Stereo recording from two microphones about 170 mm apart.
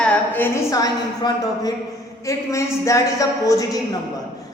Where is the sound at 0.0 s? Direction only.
10° left (ahead or behind).